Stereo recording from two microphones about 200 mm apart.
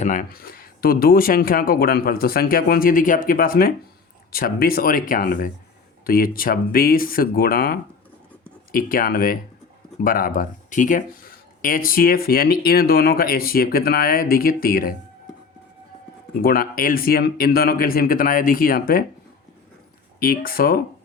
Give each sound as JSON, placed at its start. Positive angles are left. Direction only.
{"t": 0.0, "sound": "speech", "side_deg": 40}
{"t": 16.4, "sound": "speech", "side_deg": 50}
{"t": 20.1, "sound": "speech", "side_deg": 50}